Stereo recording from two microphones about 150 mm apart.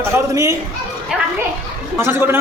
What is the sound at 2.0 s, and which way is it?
Speech, 15° right (ahead or behind).